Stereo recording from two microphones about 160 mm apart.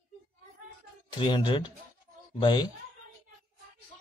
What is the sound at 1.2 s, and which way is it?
A man's voice, 30° left (ahead or behind).